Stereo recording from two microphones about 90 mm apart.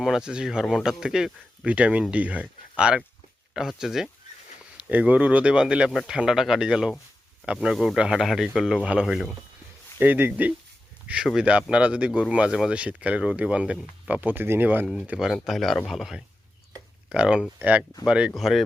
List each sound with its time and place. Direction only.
0.0 s speech: 5° right (ahead or behind)
4.9 s speech: 15° right (ahead or behind)
10.0 s speech: 20° right (ahead or behind)
15.3 s speech: centre (ahead or behind)
18.3 s speech: centre (ahead or behind)